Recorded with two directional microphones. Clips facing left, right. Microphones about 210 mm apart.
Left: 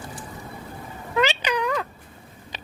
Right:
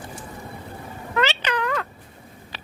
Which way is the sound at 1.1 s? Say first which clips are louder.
Left 1 dB; 15° left (ahead or behind).